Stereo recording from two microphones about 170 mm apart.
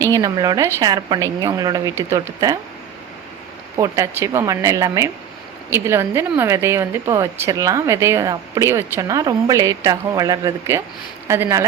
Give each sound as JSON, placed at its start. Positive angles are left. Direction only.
{"t": 0.0, "sound": "a woman's voice", "side_deg": -20}
{"t": 3.8, "sound": "a woman's voice", "side_deg": -15}